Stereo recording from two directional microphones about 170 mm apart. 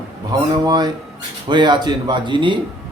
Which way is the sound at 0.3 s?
25° right (ahead or behind).